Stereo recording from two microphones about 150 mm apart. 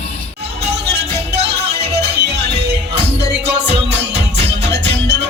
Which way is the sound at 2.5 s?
45° right (ahead or behind).